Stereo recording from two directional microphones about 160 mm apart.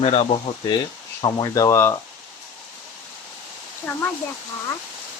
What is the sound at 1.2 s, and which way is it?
Speech, 20° left (ahead or behind).